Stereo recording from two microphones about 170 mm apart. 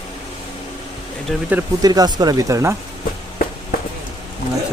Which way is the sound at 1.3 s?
5° left (ahead or behind).